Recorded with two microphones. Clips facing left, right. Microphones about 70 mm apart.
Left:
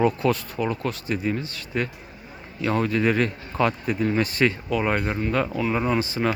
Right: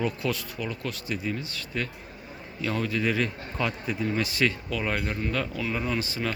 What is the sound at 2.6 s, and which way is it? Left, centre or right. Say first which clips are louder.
Speech: left 5 dB; left.